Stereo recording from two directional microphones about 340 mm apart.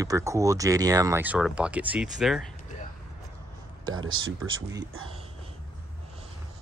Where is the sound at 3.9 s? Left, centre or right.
Right.